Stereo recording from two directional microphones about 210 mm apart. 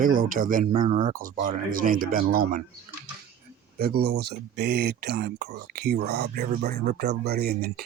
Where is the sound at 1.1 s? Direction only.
40° right (ahead or behind).